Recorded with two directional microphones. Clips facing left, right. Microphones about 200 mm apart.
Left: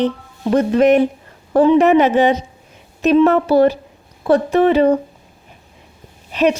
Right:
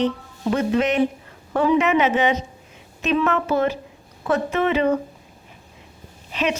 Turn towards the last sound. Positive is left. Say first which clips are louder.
# left 8 dB
turn(degrees=40)  # may be behind; listen again after turning